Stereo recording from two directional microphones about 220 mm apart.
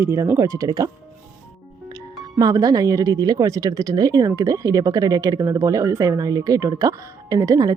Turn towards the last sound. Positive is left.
turn(degrees=-15)  # may be behind; listen again after turning